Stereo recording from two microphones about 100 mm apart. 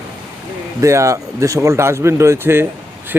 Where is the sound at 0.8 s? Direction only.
30° right (ahead or behind).